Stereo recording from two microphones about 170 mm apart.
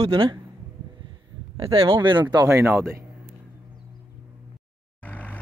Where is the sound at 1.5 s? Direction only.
35° right (ahead or behind).